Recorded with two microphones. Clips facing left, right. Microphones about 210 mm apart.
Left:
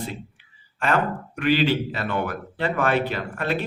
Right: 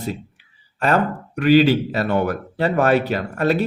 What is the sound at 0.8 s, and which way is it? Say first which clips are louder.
Speech: right 4 dB; 40° right (ahead or behind).